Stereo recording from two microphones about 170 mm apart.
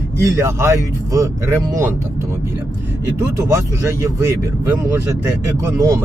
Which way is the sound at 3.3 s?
20° right (ahead or behind).